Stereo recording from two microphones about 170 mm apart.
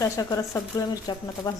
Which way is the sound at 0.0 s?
20° left (ahead or behind).